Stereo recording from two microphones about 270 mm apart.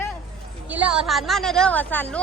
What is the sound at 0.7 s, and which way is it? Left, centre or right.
Speech, centre.